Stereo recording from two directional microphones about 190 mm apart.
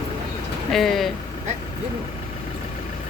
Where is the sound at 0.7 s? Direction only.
Centre (ahead or behind).